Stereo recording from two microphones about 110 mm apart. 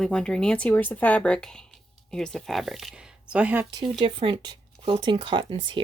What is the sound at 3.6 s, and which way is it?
Speech, 35° right (ahead or behind).